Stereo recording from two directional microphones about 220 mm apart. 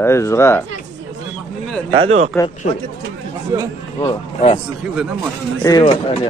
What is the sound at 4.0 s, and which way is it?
Speech, 25° left (ahead or behind).